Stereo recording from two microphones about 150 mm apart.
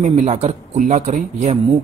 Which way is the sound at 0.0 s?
50° right (ahead or behind).